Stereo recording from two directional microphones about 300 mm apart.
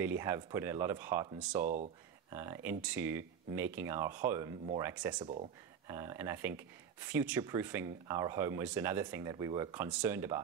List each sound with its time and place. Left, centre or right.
0.0 s speech: centre
1.6 s speech: right
2.3 s speech: centre